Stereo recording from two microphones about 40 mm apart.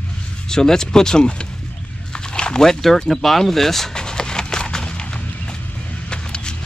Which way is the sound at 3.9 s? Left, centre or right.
Centre.